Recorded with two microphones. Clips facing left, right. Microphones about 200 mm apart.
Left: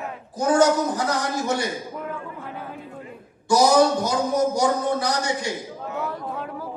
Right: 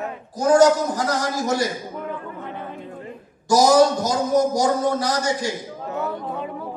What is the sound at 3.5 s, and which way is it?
Speech, 40° right (ahead or behind).